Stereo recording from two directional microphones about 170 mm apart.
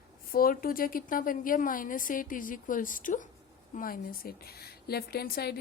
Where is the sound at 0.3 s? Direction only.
60° left (ahead or behind).